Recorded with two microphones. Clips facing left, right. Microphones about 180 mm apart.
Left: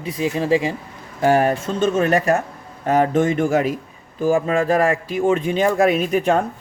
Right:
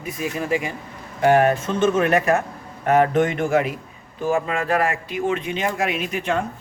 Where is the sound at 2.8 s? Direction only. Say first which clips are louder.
Even; 30° left (ahead or behind).